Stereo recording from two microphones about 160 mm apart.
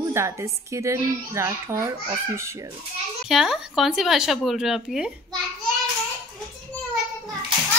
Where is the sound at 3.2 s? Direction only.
Centre (ahead or behind).